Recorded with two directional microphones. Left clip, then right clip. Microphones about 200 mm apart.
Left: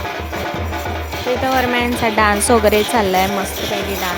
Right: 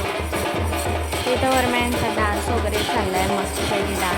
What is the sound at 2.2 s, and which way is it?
Speech, 30° left (ahead or behind).